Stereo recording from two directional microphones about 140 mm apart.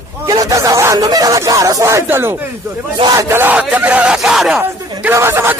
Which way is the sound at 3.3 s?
15° right (ahead or behind).